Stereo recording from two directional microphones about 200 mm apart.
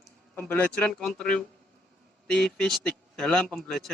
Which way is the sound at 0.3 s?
10° left (ahead or behind).